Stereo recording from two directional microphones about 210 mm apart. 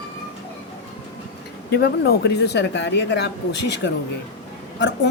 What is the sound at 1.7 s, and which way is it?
Speech, 50° left (ahead or behind).